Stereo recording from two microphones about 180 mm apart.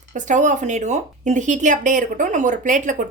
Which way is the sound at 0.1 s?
45° right (ahead or behind).